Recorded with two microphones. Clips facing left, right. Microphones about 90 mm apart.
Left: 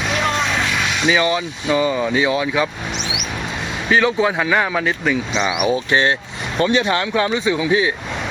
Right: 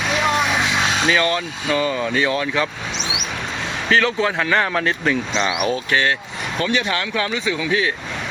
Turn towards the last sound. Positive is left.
turn(degrees=20)  # may be behind; listen again after turning